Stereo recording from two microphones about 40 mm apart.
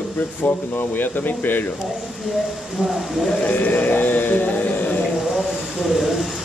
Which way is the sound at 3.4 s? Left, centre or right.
Left.